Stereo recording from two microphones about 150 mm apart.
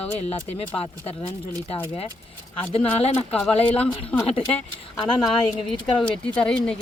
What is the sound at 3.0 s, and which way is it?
Speech, 40° left (ahead or behind).